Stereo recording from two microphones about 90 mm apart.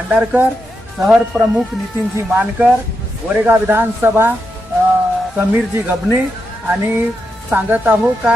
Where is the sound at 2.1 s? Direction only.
20° right (ahead or behind).